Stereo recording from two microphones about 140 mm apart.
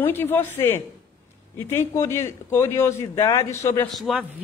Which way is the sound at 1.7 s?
20° left (ahead or behind).